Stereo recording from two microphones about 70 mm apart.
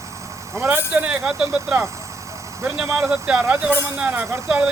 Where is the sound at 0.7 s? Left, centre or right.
Centre.